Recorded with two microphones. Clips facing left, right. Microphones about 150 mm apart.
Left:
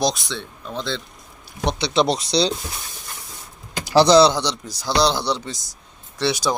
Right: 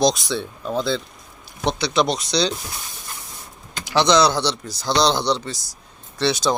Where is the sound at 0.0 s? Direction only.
Centre (ahead or behind).